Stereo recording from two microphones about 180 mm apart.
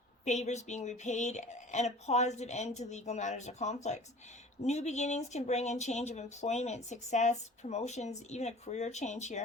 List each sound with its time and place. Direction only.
0.3 s speech: 40° left (ahead or behind)